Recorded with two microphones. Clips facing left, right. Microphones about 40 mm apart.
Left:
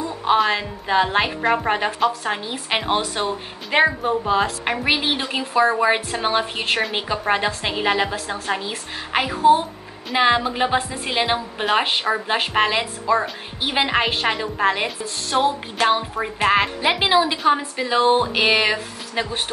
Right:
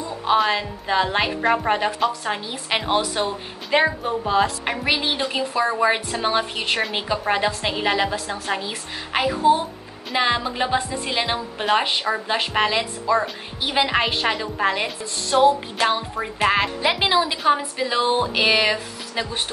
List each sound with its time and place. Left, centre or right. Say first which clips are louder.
0.4 s a woman's voice: left 1 dB; centre
4.2 s a woman's voice: right 4 dB; centre
4.8 s a woman's voice: even; centre